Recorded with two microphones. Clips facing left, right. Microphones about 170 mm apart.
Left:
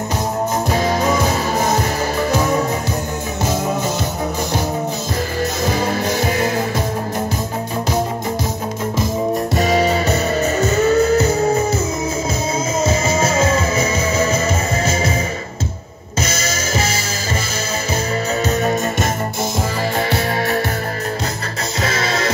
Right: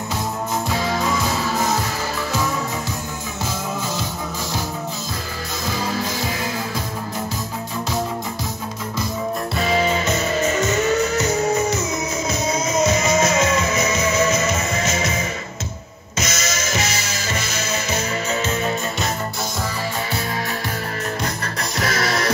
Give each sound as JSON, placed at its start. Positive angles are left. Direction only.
{"t": 0.7, "sound": "music", "side_deg": 50}
{"t": 5.7, "sound": "music", "side_deg": 60}
{"t": 9.6, "sound": "music", "side_deg": 40}
{"t": 12.8, "sound": "music", "side_deg": 30}
{"t": 16.2, "sound": "music", "side_deg": 30}
{"t": 21.8, "sound": "music", "side_deg": 25}